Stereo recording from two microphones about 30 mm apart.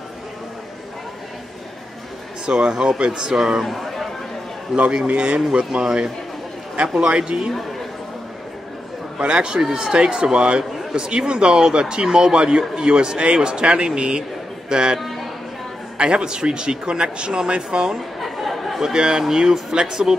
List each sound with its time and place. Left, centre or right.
2.4 s speech: right
2.7 s a man's voice: centre
3.0 s speech: right
3.3 s a man's voice: right
3.6 s a sound: centre
4.7 s speech: centre
5.1 s a man's voice: right
9.2 s a man's voice: right
15.0 s a sound: centre
16.0 s a man's voice: right
18.2 s chatter: centre
19.0 s a man's voice: centre